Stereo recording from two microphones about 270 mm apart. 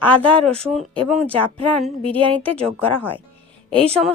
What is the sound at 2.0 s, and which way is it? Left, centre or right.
Speech, centre.